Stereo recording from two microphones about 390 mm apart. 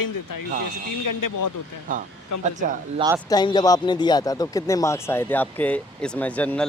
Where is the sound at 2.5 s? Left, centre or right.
Centre.